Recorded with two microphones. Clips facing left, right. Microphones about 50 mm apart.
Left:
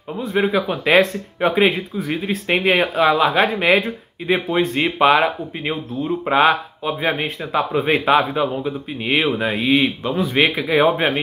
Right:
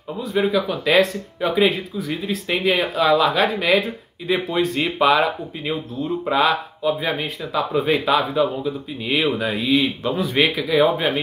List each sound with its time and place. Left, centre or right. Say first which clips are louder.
0.2 s a man's voice: left 1 dB; left
9.8 s a man's voice: left 2 dB; centre
10.5 s speech: left 1 dB; left